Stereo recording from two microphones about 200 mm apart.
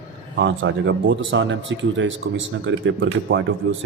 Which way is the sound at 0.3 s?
65° right (ahead or behind).